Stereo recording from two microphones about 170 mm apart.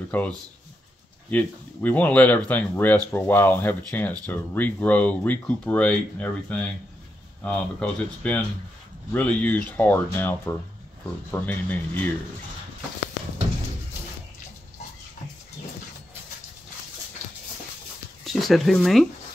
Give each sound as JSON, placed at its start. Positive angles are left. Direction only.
{"t": 0.1, "sound": "speech", "side_deg": 10}
{"t": 1.3, "sound": "speech", "side_deg": 10}
{"t": 18.2, "sound": "speech", "side_deg": 0}